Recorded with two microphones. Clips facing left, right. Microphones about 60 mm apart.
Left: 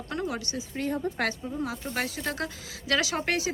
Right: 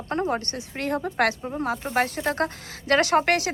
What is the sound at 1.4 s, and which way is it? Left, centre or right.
Speech, right.